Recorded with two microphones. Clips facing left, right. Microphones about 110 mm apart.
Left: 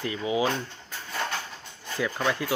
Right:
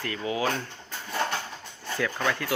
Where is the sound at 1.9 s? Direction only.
15° left (ahead or behind).